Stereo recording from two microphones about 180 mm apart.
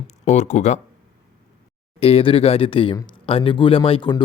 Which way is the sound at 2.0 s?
30° left (ahead or behind).